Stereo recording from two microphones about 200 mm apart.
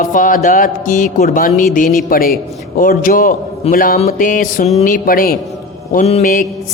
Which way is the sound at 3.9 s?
35° left (ahead or behind).